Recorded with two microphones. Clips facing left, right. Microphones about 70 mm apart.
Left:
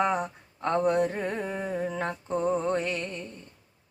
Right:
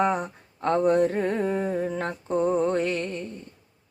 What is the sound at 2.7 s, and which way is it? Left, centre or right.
Music, right.